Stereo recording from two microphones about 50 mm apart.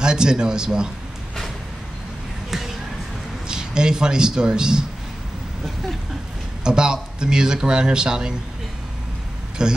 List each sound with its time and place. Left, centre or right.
0.0 s a man's voice: centre
2.5 s a sound: centre
3.4 s a man's voice: centre
6.6 s a man's voice: centre
9.6 s a man's voice: centre